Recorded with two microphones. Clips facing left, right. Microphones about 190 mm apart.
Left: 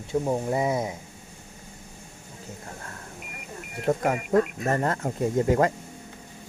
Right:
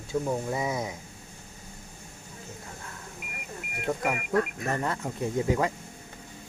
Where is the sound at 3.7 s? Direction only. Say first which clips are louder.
Left 5 dB; 35° left (ahead or behind).